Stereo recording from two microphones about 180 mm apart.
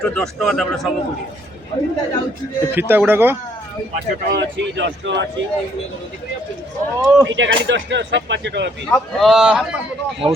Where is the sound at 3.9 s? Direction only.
75° right (ahead or behind).